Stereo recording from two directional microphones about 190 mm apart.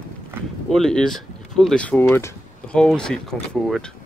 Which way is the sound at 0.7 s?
5° left (ahead or behind).